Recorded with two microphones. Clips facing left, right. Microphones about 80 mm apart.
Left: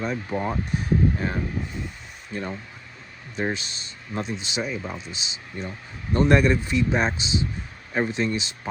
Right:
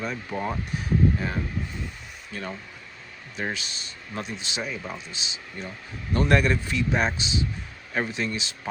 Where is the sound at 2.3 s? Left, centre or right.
Left.